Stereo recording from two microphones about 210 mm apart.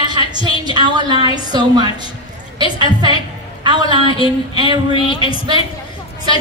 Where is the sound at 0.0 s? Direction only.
20° right (ahead or behind).